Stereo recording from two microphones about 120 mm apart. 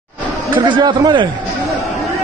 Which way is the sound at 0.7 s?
40° right (ahead or behind).